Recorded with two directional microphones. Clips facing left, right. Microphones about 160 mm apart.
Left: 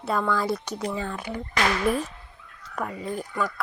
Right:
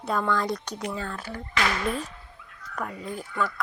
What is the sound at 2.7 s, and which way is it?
Speech, 5° left (ahead or behind).